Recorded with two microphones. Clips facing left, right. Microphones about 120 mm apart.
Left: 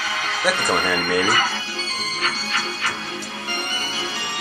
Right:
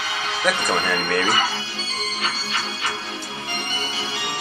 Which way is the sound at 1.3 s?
25° right (ahead or behind).